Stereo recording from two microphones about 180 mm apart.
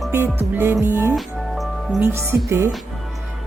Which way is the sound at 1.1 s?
Centre (ahead or behind).